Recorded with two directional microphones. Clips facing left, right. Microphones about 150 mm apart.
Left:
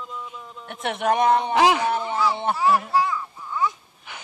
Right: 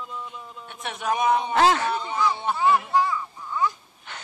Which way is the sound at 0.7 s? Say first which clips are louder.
Left 5 dB; 60° left (ahead or behind).